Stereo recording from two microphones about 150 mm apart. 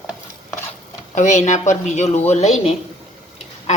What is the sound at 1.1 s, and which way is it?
A woman's voice, 50° left (ahead or behind).